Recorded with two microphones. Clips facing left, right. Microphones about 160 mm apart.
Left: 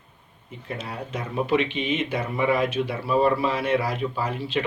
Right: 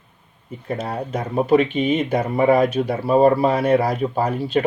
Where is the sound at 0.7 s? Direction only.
40° right (ahead or behind).